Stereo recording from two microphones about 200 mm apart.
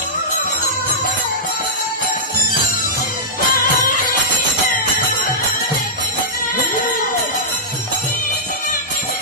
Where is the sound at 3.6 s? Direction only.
45° left (ahead or behind).